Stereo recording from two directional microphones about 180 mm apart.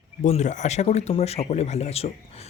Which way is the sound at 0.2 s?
40° left (ahead or behind).